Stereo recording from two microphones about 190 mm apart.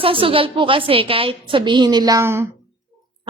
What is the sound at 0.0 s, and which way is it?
A woman's voice, 30° right (ahead or behind).